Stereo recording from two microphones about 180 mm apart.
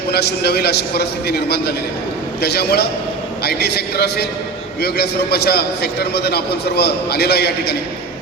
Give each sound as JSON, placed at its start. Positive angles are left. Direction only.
{"t": 0.1, "sound": "a man's voice", "side_deg": 65}